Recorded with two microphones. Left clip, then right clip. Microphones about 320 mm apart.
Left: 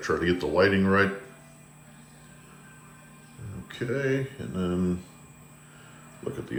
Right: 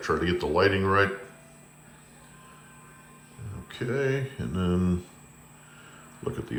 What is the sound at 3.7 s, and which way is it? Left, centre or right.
Speech, centre.